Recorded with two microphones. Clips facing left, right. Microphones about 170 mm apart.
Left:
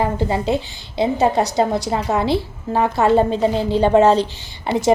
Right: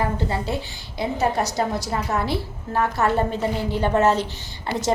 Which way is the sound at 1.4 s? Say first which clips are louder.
Left 6 dB; 65° left (ahead or behind).